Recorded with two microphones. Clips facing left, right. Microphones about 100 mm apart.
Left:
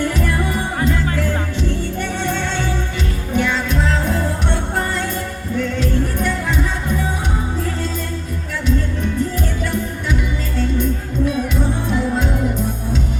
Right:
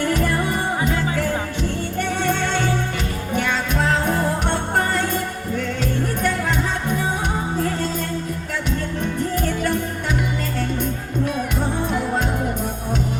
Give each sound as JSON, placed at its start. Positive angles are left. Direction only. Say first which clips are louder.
{"t": 3.3, "sound": "music", "louder": "left 3 dB", "side_deg": -55}